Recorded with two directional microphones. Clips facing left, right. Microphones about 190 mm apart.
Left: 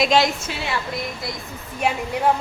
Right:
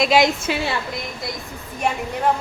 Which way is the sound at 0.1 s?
10° right (ahead or behind).